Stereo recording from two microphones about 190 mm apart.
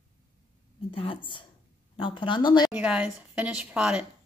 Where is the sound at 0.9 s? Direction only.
30° left (ahead or behind).